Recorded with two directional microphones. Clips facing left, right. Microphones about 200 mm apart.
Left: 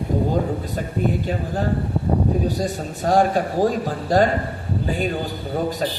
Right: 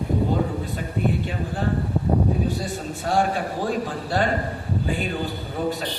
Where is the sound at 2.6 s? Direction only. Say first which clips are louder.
Left 4 dB; 40° left (ahead or behind).